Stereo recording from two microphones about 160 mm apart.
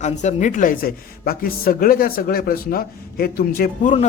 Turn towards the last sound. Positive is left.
turn(degrees=65)  # may be behind; listen again after turning